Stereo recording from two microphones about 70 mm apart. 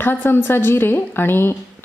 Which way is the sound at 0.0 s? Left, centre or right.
Left.